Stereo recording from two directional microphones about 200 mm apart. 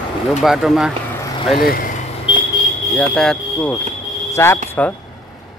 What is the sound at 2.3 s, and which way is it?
Vehicle, 25° left (ahead or behind).